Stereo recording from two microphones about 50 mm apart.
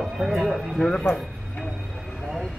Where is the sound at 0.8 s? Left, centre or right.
Centre.